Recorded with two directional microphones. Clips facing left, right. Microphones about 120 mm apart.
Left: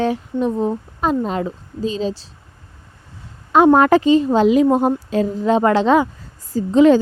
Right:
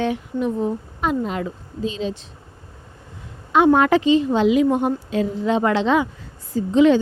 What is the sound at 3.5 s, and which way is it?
Speech, 40° left (ahead or behind).